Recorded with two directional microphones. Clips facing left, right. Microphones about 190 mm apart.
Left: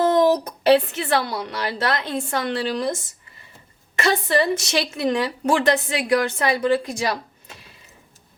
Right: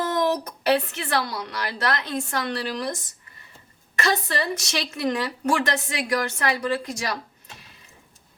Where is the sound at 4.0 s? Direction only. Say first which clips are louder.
Left 5 dB; 25° left (ahead or behind).